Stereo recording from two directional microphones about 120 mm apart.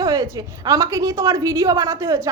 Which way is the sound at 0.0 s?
30° right (ahead or behind).